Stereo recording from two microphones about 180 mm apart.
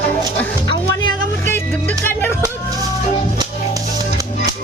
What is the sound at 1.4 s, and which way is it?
Music, 10° left (ahead or behind).